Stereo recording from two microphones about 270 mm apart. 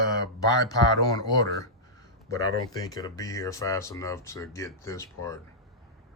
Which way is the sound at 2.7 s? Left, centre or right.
Centre.